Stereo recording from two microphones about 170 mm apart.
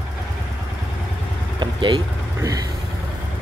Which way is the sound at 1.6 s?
25° right (ahead or behind).